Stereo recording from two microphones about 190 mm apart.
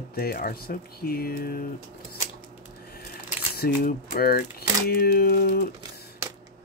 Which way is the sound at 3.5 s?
55° left (ahead or behind).